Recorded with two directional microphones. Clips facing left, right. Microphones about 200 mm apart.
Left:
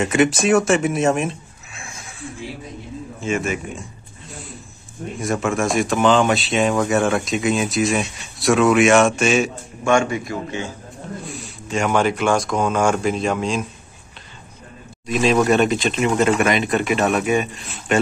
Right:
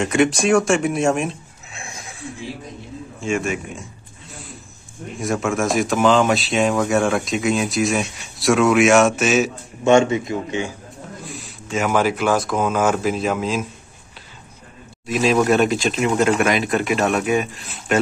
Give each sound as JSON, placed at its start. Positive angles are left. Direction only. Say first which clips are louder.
{"t": 0.0, "sound": "speech", "louder": "even", "side_deg": 5}
{"t": 3.2, "sound": "speech", "louder": "even", "side_deg": 0}
{"t": 5.2, "sound": "speech", "louder": "even", "side_deg": 0}
{"t": 9.8, "sound": "speech", "louder": "right 4 dB", "side_deg": -25}
{"t": 11.2, "sound": "speech", "louder": "left 2 dB", "side_deg": 0}
{"t": 15.0, "sound": "speech", "louder": "even", "side_deg": -5}